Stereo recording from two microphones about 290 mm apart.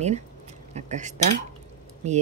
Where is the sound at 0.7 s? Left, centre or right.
Right.